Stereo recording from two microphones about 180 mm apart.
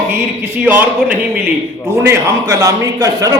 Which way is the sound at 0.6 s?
10° right (ahead or behind).